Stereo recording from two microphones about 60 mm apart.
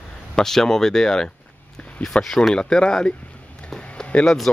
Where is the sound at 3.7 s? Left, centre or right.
Centre.